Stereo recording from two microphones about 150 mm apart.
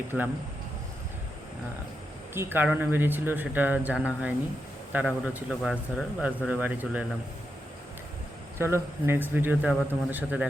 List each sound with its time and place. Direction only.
2.3 s speech: 15° right (ahead or behind)
8.5 s speech: 15° right (ahead or behind)